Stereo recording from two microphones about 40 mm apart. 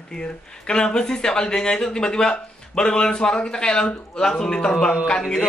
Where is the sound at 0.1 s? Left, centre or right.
Centre.